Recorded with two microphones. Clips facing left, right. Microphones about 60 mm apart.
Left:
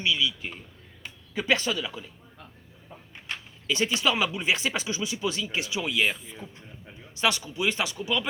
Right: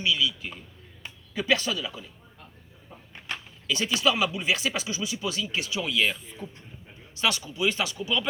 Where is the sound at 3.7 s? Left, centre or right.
Left.